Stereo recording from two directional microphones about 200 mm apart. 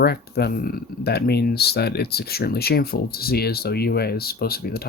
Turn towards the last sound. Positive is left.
turn(degrees=50)  # may be behind; listen again after turning